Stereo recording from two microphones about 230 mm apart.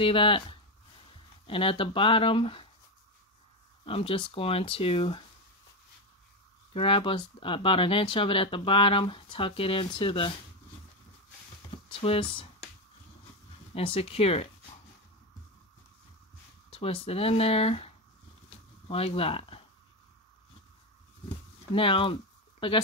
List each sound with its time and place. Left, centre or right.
0.0 s speech: left
3.8 s speech: left
6.7 s speech: left
11.7 s speech: left
13.7 s speech: left
16.7 s speech: left
21.7 s speech: left